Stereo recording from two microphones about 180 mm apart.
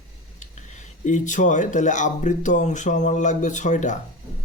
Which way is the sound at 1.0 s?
45° left (ahead or behind).